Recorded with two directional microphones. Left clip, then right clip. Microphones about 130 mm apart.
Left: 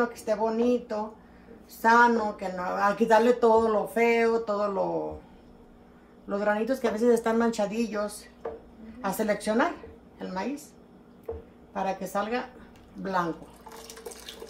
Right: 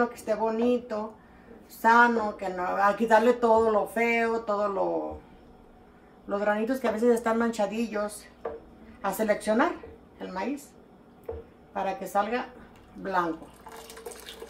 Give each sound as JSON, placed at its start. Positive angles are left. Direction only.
{"t": 0.0, "sound": "speech", "side_deg": 20}
{"t": 6.2, "sound": "a woman's voice", "side_deg": 20}
{"t": 11.7, "sound": "speech", "side_deg": 25}
{"t": 13.0, "sound": "speech", "side_deg": -5}
{"t": 13.7, "sound": "water", "side_deg": -5}